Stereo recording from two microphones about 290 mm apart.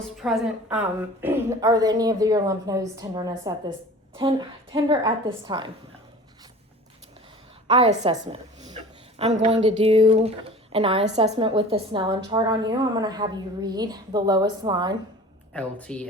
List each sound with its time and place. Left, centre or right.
0.2 s a woman's voice: centre
7.7 s a woman's voice: centre
15.5 s a woman's voice: centre